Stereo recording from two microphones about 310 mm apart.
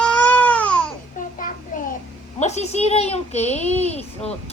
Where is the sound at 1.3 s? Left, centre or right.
Left.